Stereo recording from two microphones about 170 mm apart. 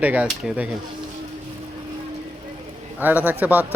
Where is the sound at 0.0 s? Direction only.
10° right (ahead or behind).